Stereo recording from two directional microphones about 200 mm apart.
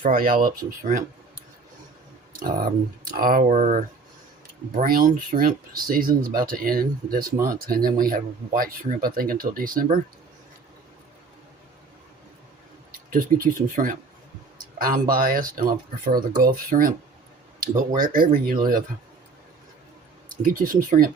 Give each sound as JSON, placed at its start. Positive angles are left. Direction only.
{"t": 0.0, "sound": "speech", "side_deg": -45}
{"t": 12.9, "sound": "speech", "side_deg": -45}
{"t": 20.3, "sound": "speech", "side_deg": -45}